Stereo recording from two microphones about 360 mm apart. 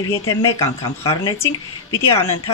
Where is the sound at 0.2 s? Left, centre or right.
Centre.